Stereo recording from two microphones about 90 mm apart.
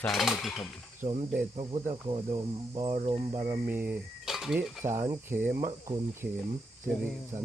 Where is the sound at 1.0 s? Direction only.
90° right.